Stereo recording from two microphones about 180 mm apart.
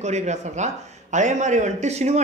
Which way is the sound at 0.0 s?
40° right (ahead or behind).